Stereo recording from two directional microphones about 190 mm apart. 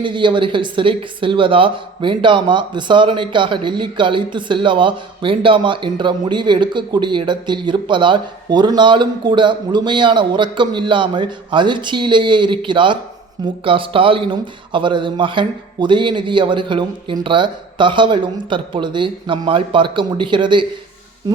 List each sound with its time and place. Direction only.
0.0 s speech: 25° right (ahead or behind)